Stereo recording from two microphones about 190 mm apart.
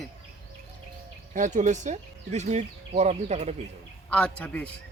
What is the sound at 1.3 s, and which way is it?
Speech, 40° right (ahead or behind).